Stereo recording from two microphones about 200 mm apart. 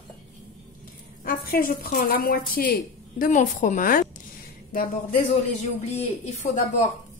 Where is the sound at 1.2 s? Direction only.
50° left (ahead or behind).